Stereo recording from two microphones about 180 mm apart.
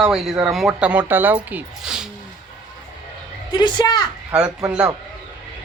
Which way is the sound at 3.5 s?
25° left (ahead or behind).